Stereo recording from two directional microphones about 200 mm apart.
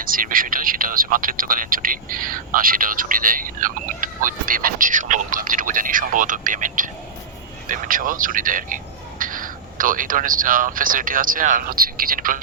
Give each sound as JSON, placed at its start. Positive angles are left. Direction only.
{"t": 0.0, "sound": "speech", "side_deg": -45}